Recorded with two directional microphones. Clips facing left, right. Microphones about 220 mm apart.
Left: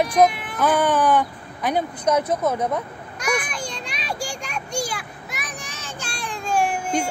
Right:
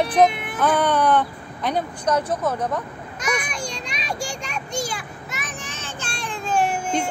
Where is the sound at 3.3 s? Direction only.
5° left (ahead or behind).